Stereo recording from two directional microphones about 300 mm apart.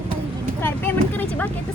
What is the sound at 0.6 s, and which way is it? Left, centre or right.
Speech, centre.